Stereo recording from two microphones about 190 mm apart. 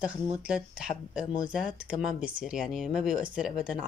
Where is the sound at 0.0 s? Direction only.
5° right (ahead or behind).